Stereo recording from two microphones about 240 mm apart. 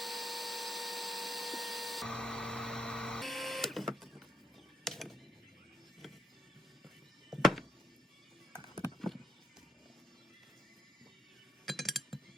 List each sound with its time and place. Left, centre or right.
0.0 s vacuum cleaner: centre
4.8 s a sound: centre
6.0 s music: centre
8.5 s rowboat: centre
11.6 s chink: centre